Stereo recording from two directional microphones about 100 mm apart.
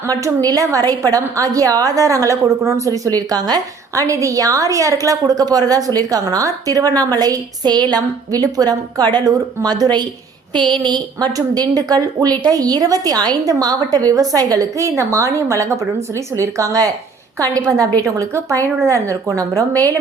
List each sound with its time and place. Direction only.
0.1 s a woman's voice: 35° right (ahead or behind)